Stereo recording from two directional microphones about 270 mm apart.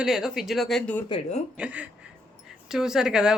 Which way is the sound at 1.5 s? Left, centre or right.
Centre.